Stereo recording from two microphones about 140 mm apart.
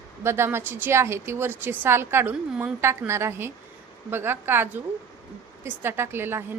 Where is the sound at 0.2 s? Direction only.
20° right (ahead or behind).